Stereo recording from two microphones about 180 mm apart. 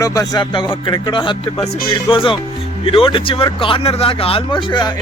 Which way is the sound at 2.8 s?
30° left (ahead or behind).